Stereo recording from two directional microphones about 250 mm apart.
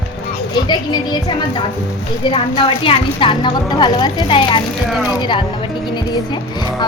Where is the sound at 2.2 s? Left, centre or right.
Left.